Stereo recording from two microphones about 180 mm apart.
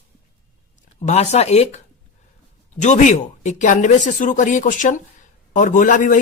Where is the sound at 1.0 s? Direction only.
40° left (ahead or behind).